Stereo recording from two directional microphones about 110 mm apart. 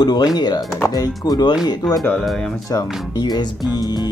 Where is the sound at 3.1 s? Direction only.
40° left (ahead or behind).